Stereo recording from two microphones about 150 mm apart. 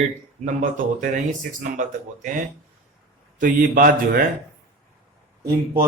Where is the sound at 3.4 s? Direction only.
65° right (ahead or behind).